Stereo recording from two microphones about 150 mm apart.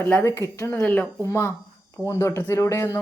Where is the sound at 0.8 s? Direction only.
10° left (ahead or behind).